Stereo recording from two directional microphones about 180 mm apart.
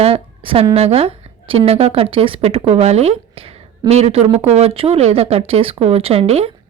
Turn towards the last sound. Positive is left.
turn(degrees=-35)  # may be behind; listen again after turning